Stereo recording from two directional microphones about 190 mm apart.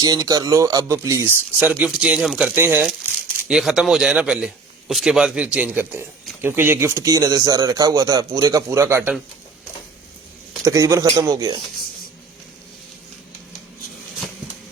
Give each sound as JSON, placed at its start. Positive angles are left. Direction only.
{"t": 0.0, "sound": "a man's voice", "side_deg": -20}
{"t": 10.6, "sound": "a man's voice", "side_deg": -15}